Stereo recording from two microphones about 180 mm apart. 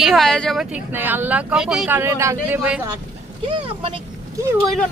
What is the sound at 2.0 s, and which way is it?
Speech, 15° right (ahead or behind).